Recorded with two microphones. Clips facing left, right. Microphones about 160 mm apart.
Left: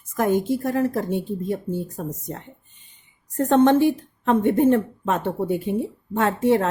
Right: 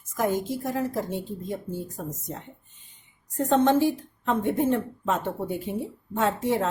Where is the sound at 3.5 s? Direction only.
60° left (ahead or behind).